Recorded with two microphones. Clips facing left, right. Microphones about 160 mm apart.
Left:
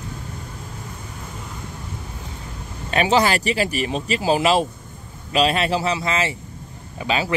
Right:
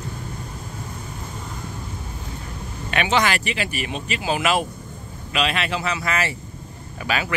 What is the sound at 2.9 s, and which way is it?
Speech, 35° left (ahead or behind).